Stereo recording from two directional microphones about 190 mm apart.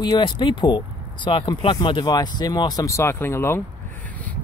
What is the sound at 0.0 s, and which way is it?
Speech, 25° left (ahead or behind).